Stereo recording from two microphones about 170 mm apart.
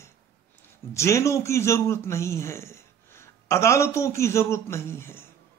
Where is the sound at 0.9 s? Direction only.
15° left (ahead or behind).